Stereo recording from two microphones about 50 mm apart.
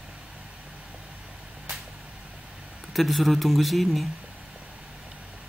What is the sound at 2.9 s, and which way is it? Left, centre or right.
Speech, centre.